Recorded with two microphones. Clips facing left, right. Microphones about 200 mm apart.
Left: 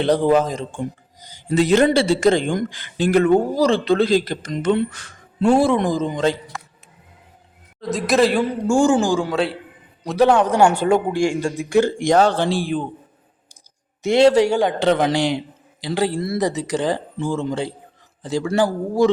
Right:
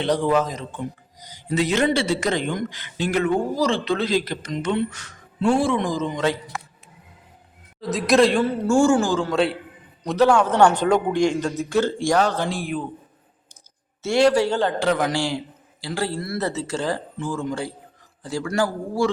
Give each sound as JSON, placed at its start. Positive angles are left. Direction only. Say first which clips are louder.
{"t": 0.0, "sound": "speech", "louder": "left 4 dB", "side_deg": 35}
{"t": 7.8, "sound": "a man's voice", "louder": "even", "side_deg": 0}
{"t": 10.2, "sound": "speech", "louder": "left 2 dB", "side_deg": 20}
{"t": 10.5, "sound": "a man's voice", "louder": "left 1 dB", "side_deg": 10}
{"t": 14.0, "sound": "speech", "louder": "left 4 dB", "side_deg": 20}